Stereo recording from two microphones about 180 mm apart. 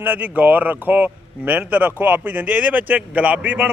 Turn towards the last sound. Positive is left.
turn(degrees=-10)  # may be behind; listen again after turning